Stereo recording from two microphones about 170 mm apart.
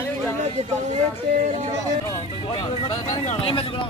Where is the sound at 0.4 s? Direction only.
40° right (ahead or behind).